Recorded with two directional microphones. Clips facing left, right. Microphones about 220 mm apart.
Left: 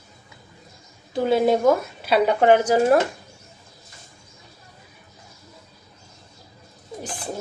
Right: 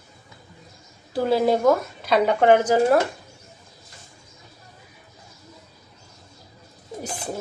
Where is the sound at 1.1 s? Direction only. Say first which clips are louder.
Left 1 dB; centre (ahead or behind).